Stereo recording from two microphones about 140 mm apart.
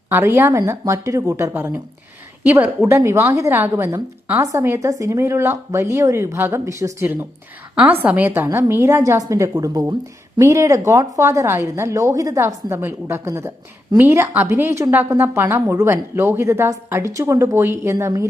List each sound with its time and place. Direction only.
0.1 s a woman's voice: 15° right (ahead or behind)